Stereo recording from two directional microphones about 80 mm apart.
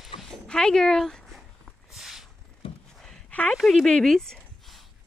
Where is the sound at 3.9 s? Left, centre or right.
Centre.